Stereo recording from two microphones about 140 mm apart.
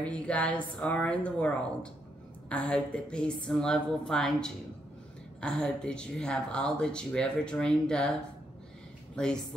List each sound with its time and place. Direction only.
0.0 s a woman's voice: 10° left (ahead or behind)